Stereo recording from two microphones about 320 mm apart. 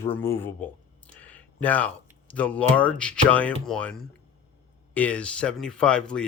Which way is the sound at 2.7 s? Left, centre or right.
Centre.